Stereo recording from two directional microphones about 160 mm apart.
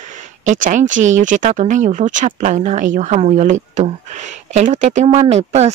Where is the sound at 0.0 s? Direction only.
50° right (ahead or behind).